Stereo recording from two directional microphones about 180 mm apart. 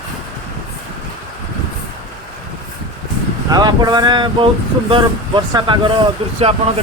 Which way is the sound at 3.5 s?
20° right (ahead or behind).